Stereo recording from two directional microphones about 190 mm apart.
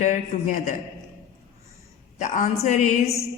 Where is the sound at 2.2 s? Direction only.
40° left (ahead or behind).